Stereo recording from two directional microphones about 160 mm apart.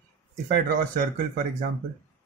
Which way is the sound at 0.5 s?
60° right (ahead or behind).